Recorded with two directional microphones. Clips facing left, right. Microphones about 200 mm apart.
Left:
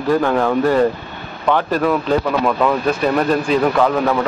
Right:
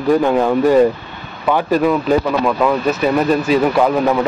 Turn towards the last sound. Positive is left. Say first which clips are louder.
# right 2 dB
turn(degrees=-10)  # may be behind; listen again after turning